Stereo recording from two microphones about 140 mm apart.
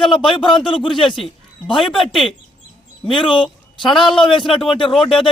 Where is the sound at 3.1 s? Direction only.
35° left (ahead or behind).